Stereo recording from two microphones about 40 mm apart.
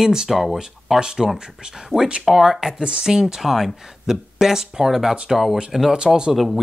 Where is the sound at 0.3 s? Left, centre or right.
Centre.